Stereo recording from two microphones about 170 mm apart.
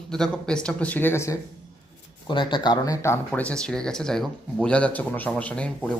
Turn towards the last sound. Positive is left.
turn(degrees=5)  # may be behind; listen again after turning